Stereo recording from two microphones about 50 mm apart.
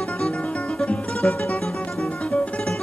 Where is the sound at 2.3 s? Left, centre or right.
Left.